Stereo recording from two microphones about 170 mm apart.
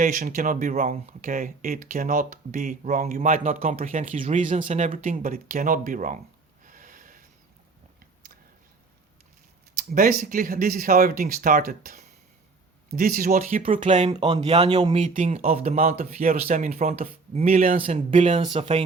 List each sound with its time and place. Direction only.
0.0 s speech: 55° right (ahead or behind)
6.7 s snort: 50° right (ahead or behind)
9.7 s speech: 55° right (ahead or behind)
14.1 s speech: 25° right (ahead or behind)
14.9 s speech: 45° right (ahead or behind)
15.5 s speech: 55° right (ahead or behind)
17.9 s speech: 40° right (ahead or behind)